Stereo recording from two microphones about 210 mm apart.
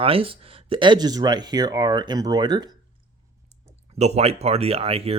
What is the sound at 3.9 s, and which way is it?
Speech, 30° right (ahead or behind).